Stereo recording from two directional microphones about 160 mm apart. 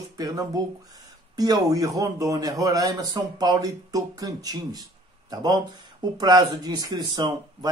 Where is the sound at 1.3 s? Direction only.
25° right (ahead or behind).